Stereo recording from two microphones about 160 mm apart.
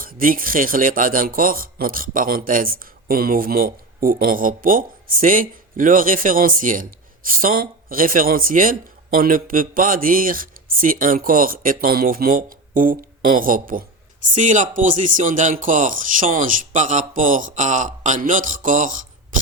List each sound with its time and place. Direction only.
0.0 s a man's voice: 60° right (ahead or behind)
14.3 s speech: 50° right (ahead or behind)